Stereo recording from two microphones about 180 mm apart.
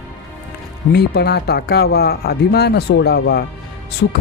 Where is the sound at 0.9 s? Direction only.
65° left (ahead or behind).